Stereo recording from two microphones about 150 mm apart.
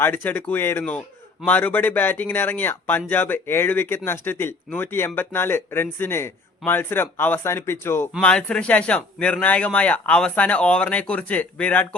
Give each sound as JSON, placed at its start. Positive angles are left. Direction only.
{"t": 0.0, "sound": "speech", "side_deg": 15}